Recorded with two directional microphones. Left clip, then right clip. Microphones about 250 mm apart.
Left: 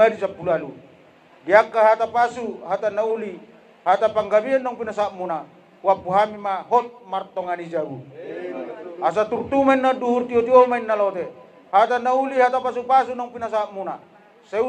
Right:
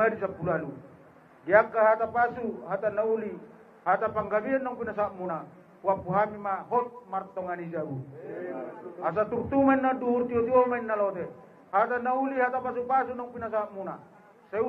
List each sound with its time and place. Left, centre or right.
0.0 s a man's voice: left
9.0 s a man's voice: left